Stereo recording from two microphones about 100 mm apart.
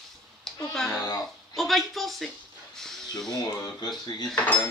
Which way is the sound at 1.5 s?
Centre (ahead or behind).